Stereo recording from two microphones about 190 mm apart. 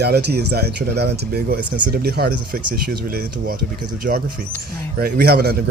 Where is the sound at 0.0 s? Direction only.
60° right (ahead or behind).